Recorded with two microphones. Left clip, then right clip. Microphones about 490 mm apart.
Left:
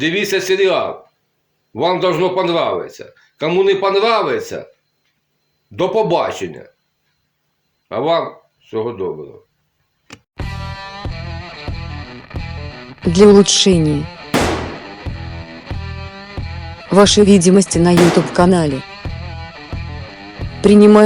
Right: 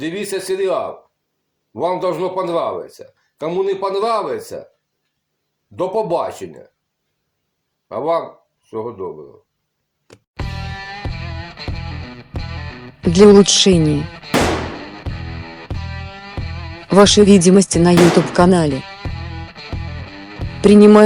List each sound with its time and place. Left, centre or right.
0.0 s speech: right
5.7 s speech: right
7.9 s speech: right
12.3 s music: centre
16.9 s speech: centre
19.0 s music: centre
20.4 s music: centre